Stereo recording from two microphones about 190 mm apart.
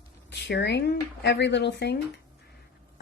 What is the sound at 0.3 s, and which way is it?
Speech, 65° left (ahead or behind).